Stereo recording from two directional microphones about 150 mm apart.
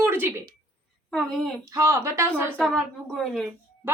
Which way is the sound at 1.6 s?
20° right (ahead or behind).